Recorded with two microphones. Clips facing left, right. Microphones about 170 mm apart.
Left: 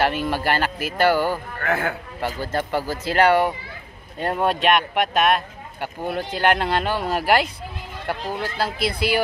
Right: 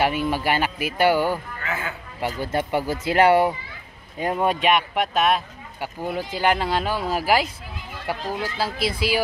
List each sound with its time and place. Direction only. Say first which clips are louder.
0.0 s speech: even; 5° right (ahead or behind)
1.6 s speech: left 6 dB; 60° left (ahead or behind)
2.2 s speech: even; 15° right (ahead or behind)
4.5 s speech: left 2 dB; 5° right (ahead or behind)
8.7 s speech: left 1 dB; 60° left (ahead or behind)